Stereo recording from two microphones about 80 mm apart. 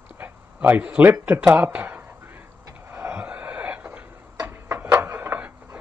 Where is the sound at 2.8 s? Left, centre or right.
Right.